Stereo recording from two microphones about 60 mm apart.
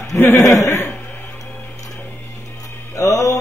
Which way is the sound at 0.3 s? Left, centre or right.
Left.